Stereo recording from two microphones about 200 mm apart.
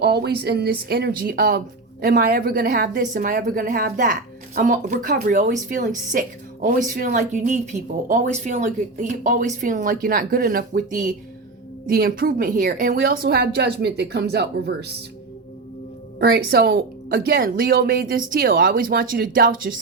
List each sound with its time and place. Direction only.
0.0 s speech: 55° right (ahead or behind)
16.1 s speech: 55° right (ahead or behind)